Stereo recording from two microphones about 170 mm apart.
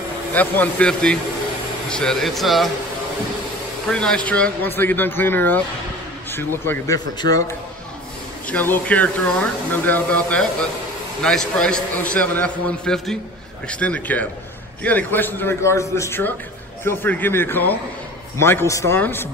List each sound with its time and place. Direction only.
0.3 s a man's voice: 10° left (ahead or behind)
3.9 s a man's voice: 5° left (ahead or behind); by 7.5 s 20° left (ahead or behind)
8.5 s a man's voice: 10° left (ahead or behind)